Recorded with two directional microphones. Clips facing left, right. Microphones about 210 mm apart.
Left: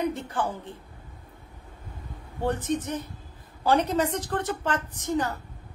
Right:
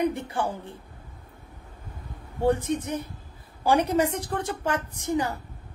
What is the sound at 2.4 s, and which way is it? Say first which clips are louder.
Speech: right 3 dB; 10° right (ahead or behind).